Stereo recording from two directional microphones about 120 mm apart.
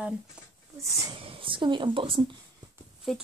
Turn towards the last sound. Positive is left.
turn(degrees=0)  # may be behind; listen again after turning